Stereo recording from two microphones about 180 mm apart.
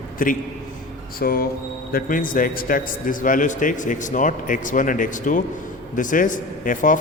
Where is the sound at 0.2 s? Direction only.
50° left (ahead or behind).